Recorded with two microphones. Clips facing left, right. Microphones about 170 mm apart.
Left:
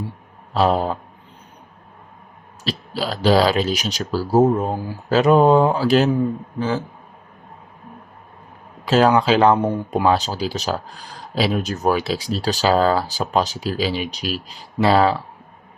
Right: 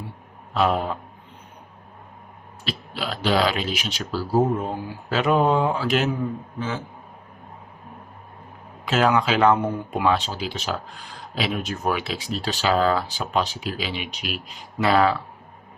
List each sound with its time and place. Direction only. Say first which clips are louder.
0.5 s speech: left 4 dB; 35° left (ahead or behind)
2.6 s speech: left 5 dB; 35° left (ahead or behind)
8.8 s speech: left 5 dB; 35° left (ahead or behind)